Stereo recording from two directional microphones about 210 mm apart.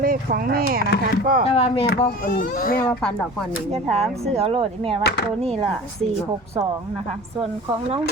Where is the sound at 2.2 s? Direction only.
45° left (ahead or behind).